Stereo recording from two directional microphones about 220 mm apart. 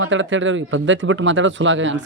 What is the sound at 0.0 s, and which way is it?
Speech, 60° right (ahead or behind).